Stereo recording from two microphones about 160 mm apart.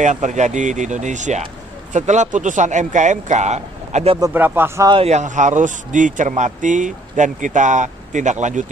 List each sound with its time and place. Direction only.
0.0 s speech: 50° right (ahead or behind)
4.2 s speech: 10° right (ahead or behind)
4.9 s speech: 40° right (ahead or behind)